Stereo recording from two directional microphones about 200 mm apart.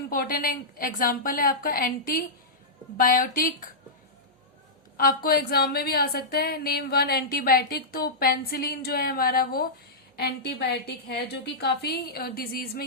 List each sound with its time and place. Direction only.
0.1 s a woman's voice: 45° left (ahead or behind)
4.9 s a woman's voice: 45° left (ahead or behind)